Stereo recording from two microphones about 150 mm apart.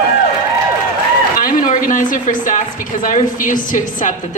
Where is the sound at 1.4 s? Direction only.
65° left (ahead or behind).